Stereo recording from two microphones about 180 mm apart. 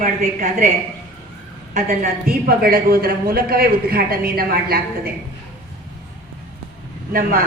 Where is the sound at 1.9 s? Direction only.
55° right (ahead or behind).